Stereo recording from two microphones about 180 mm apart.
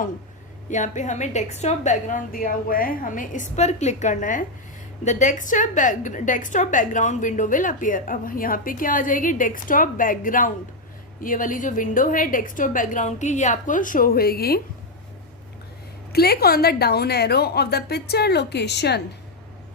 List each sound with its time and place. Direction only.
0.7 s a woman's voice: 40° left (ahead or behind); by 14.6 s 60° left (ahead or behind)
16.1 s a woman's voice: 60° left (ahead or behind)